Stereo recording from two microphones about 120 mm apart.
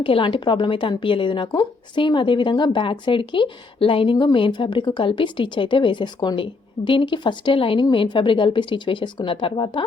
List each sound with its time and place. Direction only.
0.0 s a woman's voice: 45° left (ahead or behind)